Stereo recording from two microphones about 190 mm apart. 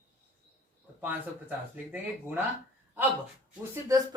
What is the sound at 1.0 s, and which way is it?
Speech, 10° right (ahead or behind).